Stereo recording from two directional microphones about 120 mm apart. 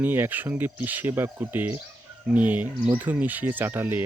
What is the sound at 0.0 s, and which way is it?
Speech, 15° right (ahead or behind).